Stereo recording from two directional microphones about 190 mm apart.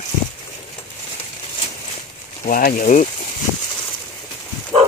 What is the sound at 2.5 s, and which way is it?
Speech, 50° left (ahead or behind).